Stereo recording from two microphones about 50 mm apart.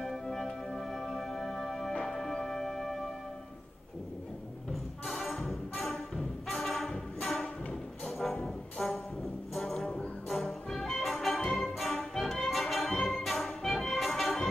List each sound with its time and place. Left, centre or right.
0.0 s music: centre
5.0 s music: centre
8.7 s music: centre
9.8 s music: centre